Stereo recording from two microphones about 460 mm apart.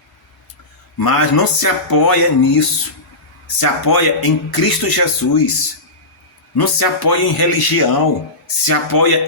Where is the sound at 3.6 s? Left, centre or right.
Left.